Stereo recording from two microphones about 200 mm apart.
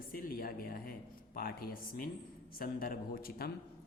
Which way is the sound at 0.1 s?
45° left (ahead or behind).